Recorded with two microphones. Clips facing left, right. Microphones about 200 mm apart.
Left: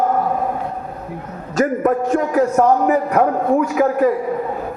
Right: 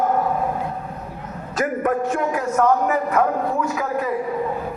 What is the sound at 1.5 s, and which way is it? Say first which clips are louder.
A man's voice: left 5 dB; 40° left (ahead or behind).